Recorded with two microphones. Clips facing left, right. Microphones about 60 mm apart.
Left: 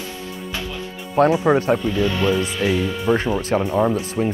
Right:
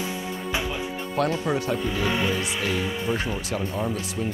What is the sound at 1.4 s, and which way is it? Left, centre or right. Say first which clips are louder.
Speech: left 8 dB; left.